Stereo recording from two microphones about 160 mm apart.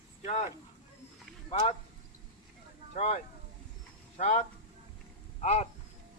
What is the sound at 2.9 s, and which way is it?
Speech, 45° left (ahead or behind).